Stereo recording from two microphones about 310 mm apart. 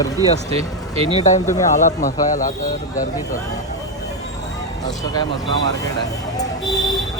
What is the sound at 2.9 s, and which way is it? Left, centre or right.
Speech, centre.